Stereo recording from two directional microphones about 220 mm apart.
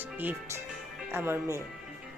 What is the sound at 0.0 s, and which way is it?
Speech, 10° right (ahead or behind).